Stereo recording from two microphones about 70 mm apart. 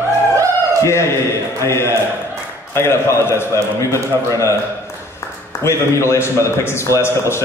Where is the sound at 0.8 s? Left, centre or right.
Left.